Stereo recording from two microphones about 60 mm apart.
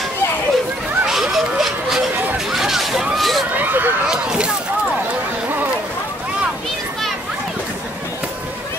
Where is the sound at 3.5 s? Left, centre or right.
Right.